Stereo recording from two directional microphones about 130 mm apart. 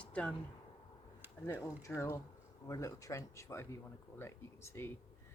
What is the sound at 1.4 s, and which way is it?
Speech, 20° left (ahead or behind).